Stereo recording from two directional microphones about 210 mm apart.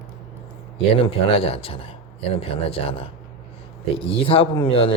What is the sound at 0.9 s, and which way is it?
Speech, 25° left (ahead or behind).